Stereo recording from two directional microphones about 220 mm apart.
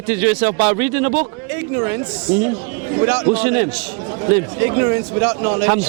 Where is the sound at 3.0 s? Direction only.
15° right (ahead or behind).